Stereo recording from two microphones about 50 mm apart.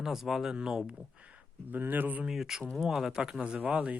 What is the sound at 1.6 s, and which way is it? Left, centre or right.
Speech, right.